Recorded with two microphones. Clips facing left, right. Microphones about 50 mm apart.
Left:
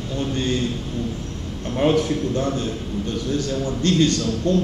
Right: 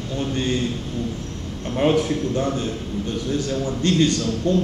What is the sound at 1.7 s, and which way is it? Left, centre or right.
A man's voice, centre.